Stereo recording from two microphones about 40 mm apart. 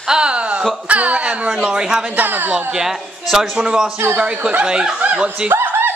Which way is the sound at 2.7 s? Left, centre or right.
Centre.